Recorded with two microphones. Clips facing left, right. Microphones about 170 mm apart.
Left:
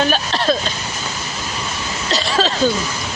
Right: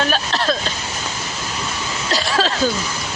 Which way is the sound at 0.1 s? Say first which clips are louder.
Left 2 dB; centre (ahead or behind).